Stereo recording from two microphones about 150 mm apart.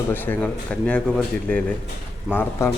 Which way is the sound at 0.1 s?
10° left (ahead or behind).